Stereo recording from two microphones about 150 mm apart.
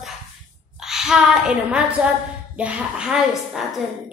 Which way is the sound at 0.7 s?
5° right (ahead or behind).